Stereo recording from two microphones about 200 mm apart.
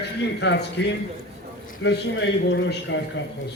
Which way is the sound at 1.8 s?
65° left (ahead or behind).